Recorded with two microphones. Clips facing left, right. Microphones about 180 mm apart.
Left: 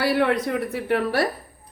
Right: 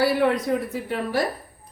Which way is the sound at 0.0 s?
70° left (ahead or behind).